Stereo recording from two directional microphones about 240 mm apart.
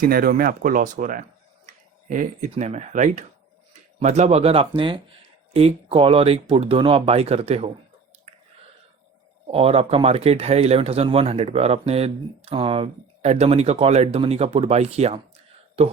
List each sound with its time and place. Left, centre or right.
0.0 s speech: right
9.5 s speech: right